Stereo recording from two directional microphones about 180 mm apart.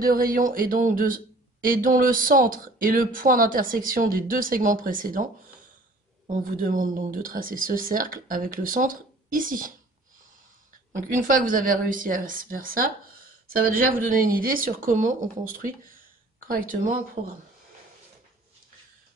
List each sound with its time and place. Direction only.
0.0 s speech: 50° right (ahead or behind)
11.0 s speech: 45° right (ahead or behind)